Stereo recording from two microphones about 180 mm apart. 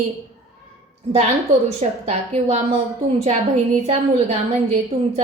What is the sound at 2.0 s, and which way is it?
A woman's voice, 35° right (ahead or behind).